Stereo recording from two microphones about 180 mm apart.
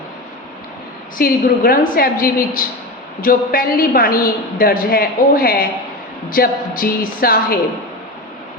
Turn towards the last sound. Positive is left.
turn(degrees=55)  # may be behind; listen again after turning